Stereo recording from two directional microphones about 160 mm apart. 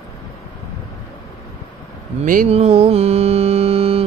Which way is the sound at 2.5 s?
40° right (ahead or behind).